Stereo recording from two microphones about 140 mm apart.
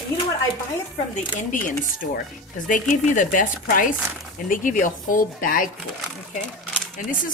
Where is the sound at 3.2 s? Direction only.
70° left (ahead or behind).